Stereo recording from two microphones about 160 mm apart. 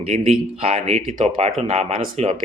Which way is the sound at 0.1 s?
40° right (ahead or behind).